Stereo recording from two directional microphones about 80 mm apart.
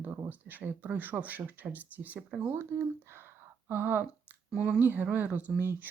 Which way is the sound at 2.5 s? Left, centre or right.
Right.